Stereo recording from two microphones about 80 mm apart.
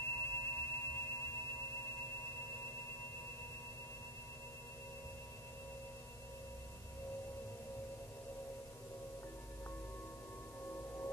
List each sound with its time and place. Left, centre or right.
0.0 s chirp tone: left
10.6 s singing bowl: left